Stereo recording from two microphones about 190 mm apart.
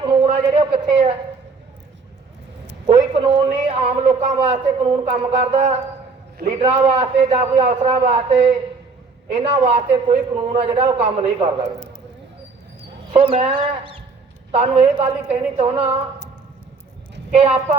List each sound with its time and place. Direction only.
0.0 s a sound: 30° right (ahead or behind)
3.2 s a man's voice: 30° right (ahead or behind)
13.1 s a man's voice: 30° right (ahead or behind)
17.3 s a man's voice: 30° right (ahead or behind)